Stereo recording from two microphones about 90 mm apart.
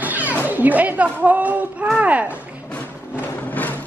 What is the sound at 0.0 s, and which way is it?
Music, 20° right (ahead or behind).